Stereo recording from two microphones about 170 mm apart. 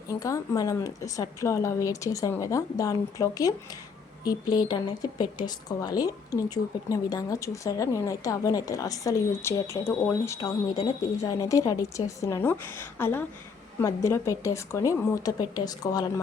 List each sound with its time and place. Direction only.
0.1 s a woman's voice: 20° left (ahead or behind)